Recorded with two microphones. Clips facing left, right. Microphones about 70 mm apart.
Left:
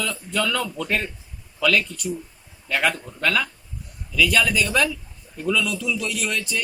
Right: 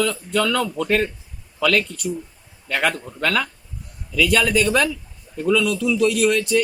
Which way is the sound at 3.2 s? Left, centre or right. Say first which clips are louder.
Right 1 dB; right.